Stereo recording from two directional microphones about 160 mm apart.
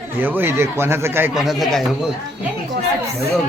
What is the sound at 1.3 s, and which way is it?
Speech, centre (ahead or behind).